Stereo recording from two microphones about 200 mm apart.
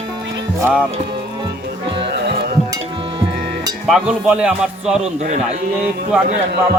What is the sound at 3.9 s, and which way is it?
Speech, 5° right (ahead or behind).